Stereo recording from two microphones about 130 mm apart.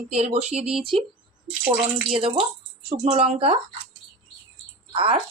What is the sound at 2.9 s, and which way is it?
Speech, 50° right (ahead or behind).